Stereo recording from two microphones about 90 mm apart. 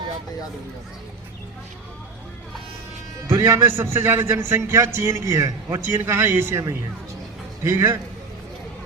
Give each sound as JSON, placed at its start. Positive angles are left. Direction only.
{"t": 3.2, "sound": "a man's voice", "side_deg": -30}
{"t": 5.8, "sound": "a man's voice", "side_deg": -25}